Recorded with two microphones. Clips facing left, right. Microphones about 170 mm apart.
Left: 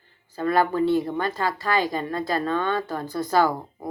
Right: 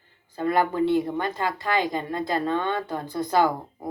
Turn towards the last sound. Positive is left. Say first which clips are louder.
# left 1 dB
turn(degrees=-20)  # may be behind; listen again after turning